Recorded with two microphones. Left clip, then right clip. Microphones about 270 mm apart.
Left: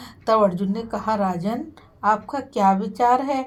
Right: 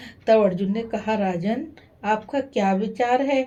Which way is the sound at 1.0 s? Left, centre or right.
Left.